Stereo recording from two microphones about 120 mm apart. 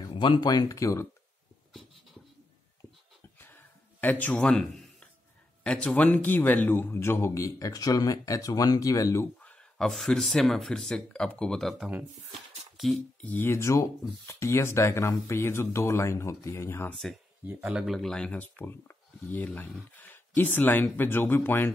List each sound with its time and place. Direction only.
0.0 s speech: 40° left (ahead or behind); by 1.0 s 25° left (ahead or behind)
3.3 s a sound: 15° left (ahead or behind)
5.6 s speech: 10° left (ahead or behind); by 9.3 s 25° left (ahead or behind)
9.4 s speech: 10° left (ahead or behind)
12.7 s a sound: centre (ahead or behind)
13.2 s speech: 15° left (ahead or behind)
16.9 s speech: centre (ahead or behind)
17.5 s a man's voice: 15° right (ahead or behind)
17.8 s speech: centre (ahead or behind); by 21.7 s 20° left (ahead or behind)